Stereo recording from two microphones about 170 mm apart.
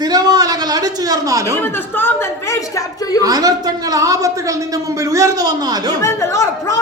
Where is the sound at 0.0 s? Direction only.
20° right (ahead or behind).